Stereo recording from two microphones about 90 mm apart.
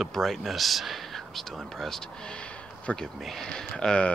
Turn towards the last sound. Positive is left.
turn(degrees=10)  # may be behind; listen again after turning